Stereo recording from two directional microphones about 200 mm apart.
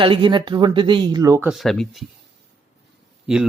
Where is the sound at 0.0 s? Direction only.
25° right (ahead or behind).